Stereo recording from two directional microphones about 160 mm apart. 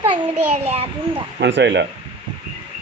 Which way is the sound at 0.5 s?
40° right (ahead or behind).